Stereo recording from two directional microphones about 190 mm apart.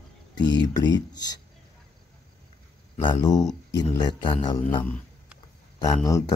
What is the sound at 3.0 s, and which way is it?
Speech, 20° left (ahead or behind).